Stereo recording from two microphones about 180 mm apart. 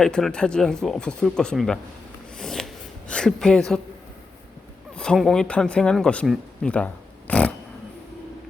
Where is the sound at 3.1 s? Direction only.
5° left (ahead or behind).